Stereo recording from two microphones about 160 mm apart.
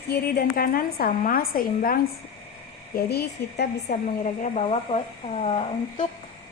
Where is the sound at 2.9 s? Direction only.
80° left.